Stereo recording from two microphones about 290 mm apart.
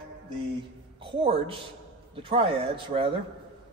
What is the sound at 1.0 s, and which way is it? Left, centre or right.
Speech, centre.